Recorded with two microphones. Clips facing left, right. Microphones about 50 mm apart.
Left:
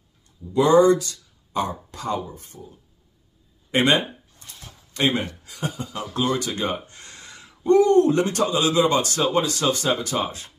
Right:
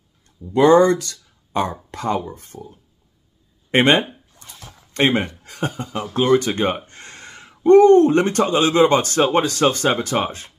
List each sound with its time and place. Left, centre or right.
0.5 s speech: right
3.7 s speech: right